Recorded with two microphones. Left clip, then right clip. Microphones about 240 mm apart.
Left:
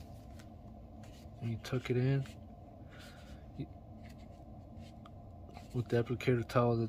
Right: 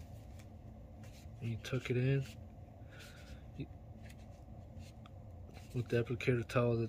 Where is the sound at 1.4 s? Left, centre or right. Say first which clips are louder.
Left 2 dB; left.